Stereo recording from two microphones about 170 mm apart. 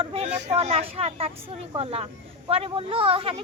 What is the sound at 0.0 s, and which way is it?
A woman's voice, 35° right (ahead or behind).